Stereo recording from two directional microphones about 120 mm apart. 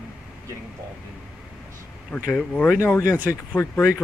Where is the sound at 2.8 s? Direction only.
20° left (ahead or behind).